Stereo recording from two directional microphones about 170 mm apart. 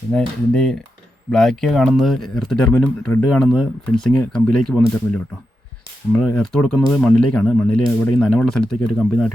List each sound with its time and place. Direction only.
0.1 s speech: 5° left (ahead or behind)
6.1 s speech: 5° left (ahead or behind)